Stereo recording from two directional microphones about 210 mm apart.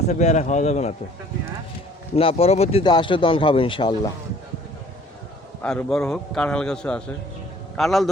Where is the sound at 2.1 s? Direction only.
30° left (ahead or behind).